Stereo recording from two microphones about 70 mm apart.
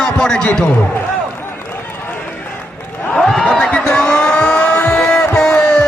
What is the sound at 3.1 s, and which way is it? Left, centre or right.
Vehicle, centre.